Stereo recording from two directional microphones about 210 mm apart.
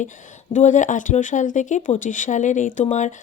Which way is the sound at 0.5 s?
35° left (ahead or behind).